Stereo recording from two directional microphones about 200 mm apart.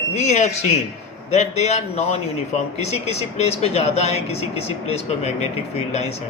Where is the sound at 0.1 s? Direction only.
35° left (ahead or behind).